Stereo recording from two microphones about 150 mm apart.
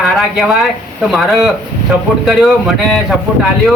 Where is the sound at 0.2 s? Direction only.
Centre (ahead or behind).